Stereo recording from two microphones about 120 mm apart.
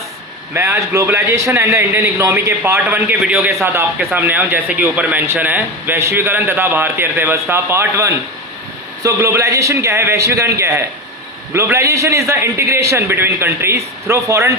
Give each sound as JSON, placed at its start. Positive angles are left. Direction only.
{"t": 0.5, "sound": "speech", "side_deg": -20}